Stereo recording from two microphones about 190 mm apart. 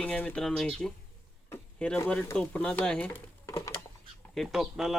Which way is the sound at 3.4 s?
15° left (ahead or behind).